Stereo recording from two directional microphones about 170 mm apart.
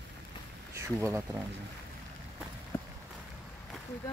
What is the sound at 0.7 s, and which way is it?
Speech, 15° right (ahead or behind).